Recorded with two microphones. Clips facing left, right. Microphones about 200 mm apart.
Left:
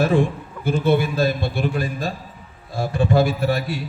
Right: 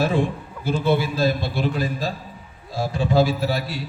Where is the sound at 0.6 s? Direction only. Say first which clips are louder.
Left 2 dB; 50° left (ahead or behind).